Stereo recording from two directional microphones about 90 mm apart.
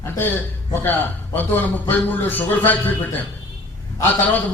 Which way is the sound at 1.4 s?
20° left (ahead or behind).